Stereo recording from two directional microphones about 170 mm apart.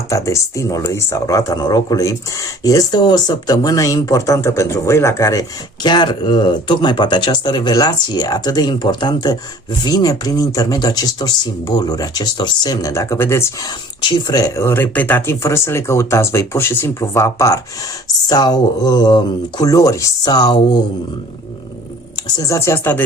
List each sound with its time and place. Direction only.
0.1 s speech: 15° left (ahead or behind)
22.4 s speech: 20° left (ahead or behind)